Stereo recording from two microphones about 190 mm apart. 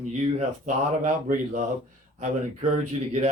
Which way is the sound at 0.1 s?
35° right (ahead or behind).